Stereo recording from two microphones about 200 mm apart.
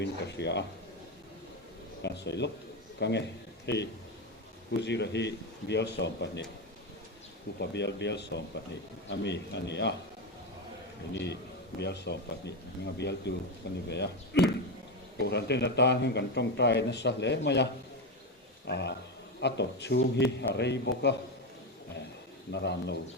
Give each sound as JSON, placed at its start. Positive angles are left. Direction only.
{"t": 0.0, "sound": "a man's voice", "side_deg": 60}
{"t": 2.0, "sound": "a man's voice", "side_deg": 60}
{"t": 7.6, "sound": "a man's voice", "side_deg": 60}
{"t": 11.1, "sound": "a man's voice", "side_deg": 60}
{"t": 18.7, "sound": "a man's voice", "side_deg": 60}
{"t": 22.5, "sound": "a man's voice", "side_deg": 60}